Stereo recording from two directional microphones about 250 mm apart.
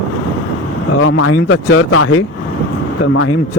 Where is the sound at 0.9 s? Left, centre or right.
Left.